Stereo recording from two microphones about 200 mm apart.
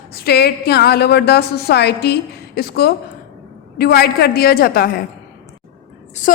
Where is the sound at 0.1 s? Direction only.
55° left (ahead or behind).